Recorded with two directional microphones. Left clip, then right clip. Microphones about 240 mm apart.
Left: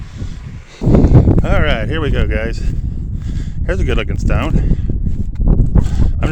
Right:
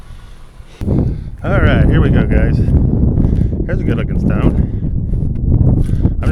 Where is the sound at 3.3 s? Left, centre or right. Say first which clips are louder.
Right 2 dB; left.